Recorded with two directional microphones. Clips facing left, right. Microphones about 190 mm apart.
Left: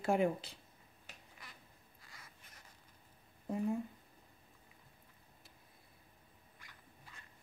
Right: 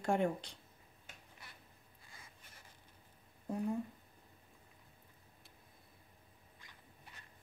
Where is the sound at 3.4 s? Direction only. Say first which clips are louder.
Left 1 dB; centre (ahead or behind).